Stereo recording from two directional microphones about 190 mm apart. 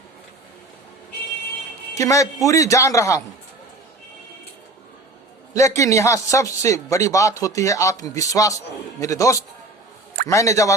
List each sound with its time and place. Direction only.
2.0 s a man's voice: 15° left (ahead or behind)
5.5 s a man's voice: 15° left (ahead or behind)